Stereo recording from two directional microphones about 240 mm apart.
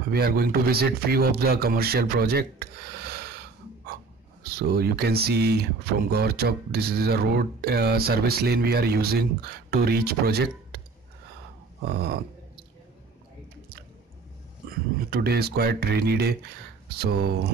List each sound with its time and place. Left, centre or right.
0.1 s speech: right
4.4 s speech: right
11.9 s speech: right
14.7 s speech: right